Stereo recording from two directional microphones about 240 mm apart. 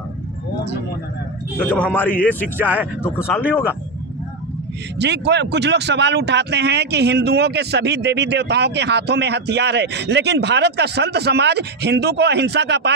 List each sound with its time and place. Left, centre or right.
1.6 s a man's voice: centre
2.5 s speech: centre
3.0 s speech: centre
4.9 s speech: right